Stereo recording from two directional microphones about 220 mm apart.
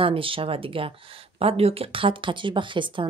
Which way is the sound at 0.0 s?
25° right (ahead or behind).